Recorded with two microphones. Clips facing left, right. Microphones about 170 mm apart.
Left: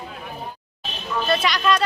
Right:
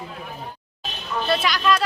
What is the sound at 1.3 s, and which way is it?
Speech, centre (ahead or behind).